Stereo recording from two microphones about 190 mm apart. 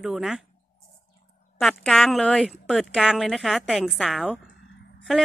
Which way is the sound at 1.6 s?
Centre (ahead or behind).